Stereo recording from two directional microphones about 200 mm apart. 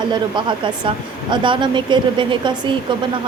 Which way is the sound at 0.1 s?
25° right (ahead or behind).